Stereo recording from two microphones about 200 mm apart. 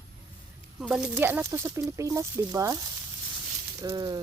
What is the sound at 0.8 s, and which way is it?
Speech, 5° right (ahead or behind).